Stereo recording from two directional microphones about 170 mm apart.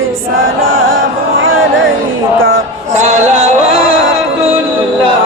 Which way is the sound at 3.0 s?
45° right (ahead or behind).